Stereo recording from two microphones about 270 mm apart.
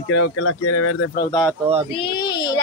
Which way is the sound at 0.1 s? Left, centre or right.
Left.